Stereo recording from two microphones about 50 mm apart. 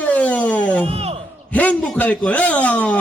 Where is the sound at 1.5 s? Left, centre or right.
Left.